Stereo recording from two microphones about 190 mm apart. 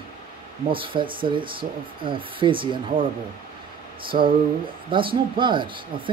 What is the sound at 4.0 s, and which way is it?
Speech, 25° right (ahead or behind).